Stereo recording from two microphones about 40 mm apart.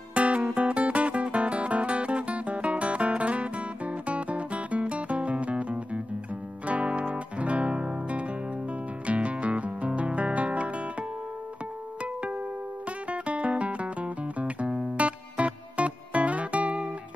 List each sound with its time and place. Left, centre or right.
0.1 s music: right
6.6 s guitar: right
9.0 s music: right